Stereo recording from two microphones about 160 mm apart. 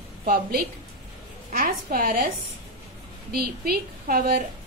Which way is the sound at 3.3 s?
75° right (ahead or behind).